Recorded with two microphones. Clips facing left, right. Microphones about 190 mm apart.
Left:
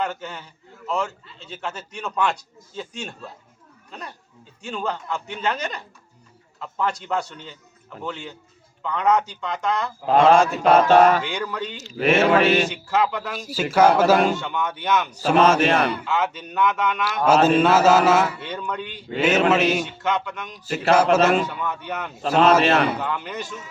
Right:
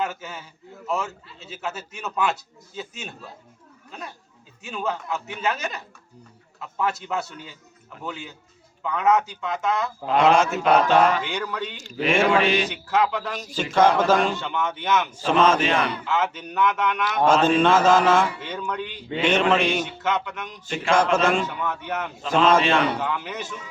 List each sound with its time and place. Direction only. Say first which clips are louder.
0.0 s a man's voice: left 1 dB; 5° right (ahead or behind)
4.6 s a man's voice: left 1 dB; 5° right (ahead or behind)
10.6 s mantra: left 4 dB; 45° left (ahead or behind)
11.2 s a man's voice: left 1 dB; centre (ahead or behind)
12.5 s mantra: left 3 dB; 45° left (ahead or behind)
12.7 s a man's voice: even; centre (ahead or behind)
15.5 s mantra: left 3 dB; 50° left (ahead or behind)
15.9 s a man's voice: left 1 dB; centre (ahead or behind)
22.6 s mantra: left 2 dB; 45° left (ahead or behind)
23.0 s a man's voice: even; 5° right (ahead or behind)